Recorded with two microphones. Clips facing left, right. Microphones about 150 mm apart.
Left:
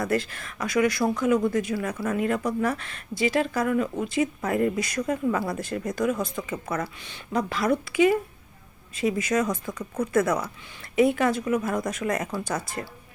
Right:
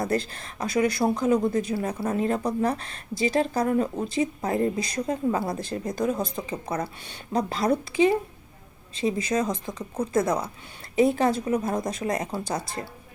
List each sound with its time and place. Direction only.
0.0 s speech: 30° right (ahead or behind)